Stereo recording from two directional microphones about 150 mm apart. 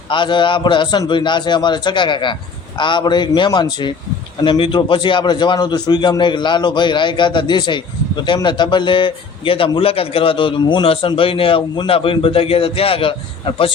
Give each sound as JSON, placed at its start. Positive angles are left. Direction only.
{"t": 0.1, "sound": "a man's voice", "side_deg": 30}